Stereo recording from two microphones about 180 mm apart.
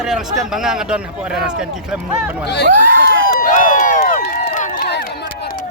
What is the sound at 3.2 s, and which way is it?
Run, 50° left (ahead or behind).